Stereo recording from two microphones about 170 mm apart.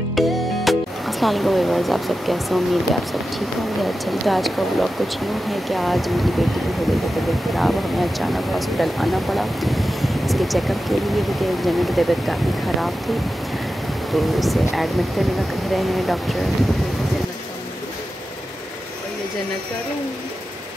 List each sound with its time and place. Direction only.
0.1 s speech: centre (ahead or behind)
7.5 s speech: centre (ahead or behind)
14.1 s speech: centre (ahead or behind)